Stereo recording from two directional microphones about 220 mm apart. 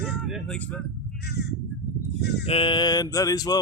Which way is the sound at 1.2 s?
45° left (ahead or behind).